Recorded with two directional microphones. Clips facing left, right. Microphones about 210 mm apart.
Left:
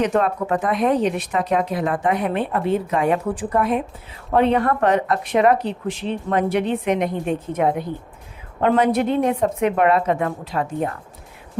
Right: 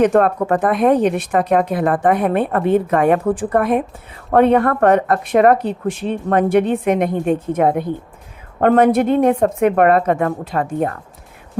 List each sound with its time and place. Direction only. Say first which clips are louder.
0.0 s speech: right 6 dB; 50° right (ahead or behind)